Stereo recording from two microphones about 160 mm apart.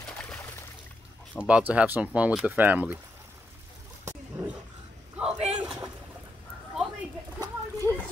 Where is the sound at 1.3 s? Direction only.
10° right (ahead or behind).